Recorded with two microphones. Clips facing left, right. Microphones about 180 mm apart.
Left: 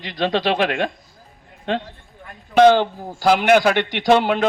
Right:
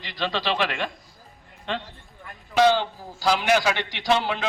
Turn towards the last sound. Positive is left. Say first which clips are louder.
# left 8 dB
turn(degrees=55)  # may be behind; listen again after turning